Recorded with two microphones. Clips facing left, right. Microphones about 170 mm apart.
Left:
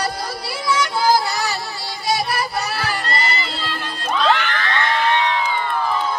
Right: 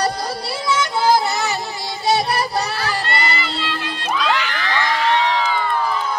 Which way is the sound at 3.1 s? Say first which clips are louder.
Right 1 dB; 35° left (ahead or behind).